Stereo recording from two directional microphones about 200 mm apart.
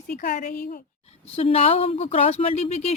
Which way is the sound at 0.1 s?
45° left (ahead or behind).